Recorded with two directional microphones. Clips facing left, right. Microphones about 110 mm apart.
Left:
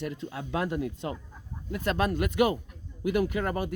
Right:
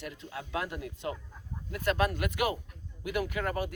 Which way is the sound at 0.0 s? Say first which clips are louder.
Left 6 dB; 30° left (ahead or behind).